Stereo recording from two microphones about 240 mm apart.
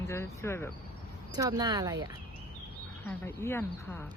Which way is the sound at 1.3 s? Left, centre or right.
Centre.